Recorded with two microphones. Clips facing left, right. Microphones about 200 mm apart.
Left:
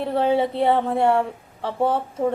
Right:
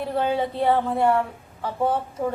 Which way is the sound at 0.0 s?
25° left (ahead or behind).